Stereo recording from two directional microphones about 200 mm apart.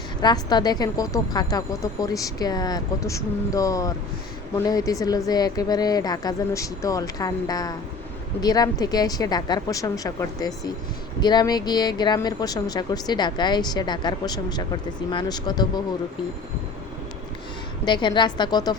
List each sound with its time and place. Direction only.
0.2 s speech: 20° left (ahead or behind)
17.8 s speech: 25° left (ahead or behind)